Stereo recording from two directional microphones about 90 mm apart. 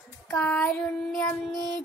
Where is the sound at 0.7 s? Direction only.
10° left (ahead or behind).